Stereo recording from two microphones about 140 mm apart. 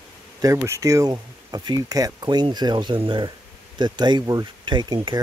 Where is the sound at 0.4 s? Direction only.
25° right (ahead or behind).